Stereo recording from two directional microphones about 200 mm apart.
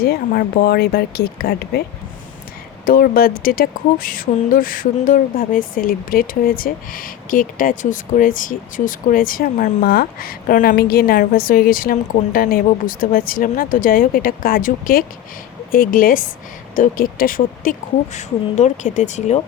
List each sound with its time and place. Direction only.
0.0 s speech: 50° left (ahead or behind)
2.8 s speech: 45° left (ahead or behind)